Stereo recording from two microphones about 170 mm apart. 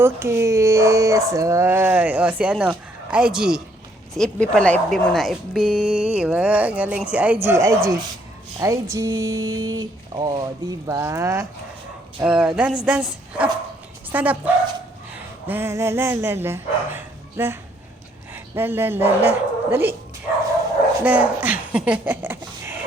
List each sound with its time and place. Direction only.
0.0 s speech: 15° right (ahead or behind)
12.2 s speech: 5° right (ahead or behind)
21.0 s speech: 10° right (ahead or behind)